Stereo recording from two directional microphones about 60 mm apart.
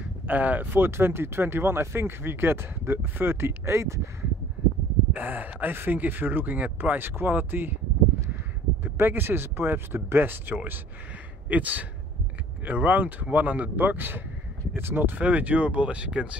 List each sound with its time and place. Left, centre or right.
0.0 s speech: right
5.1 s speech: right
8.8 s speech: right; by 16.3 s centre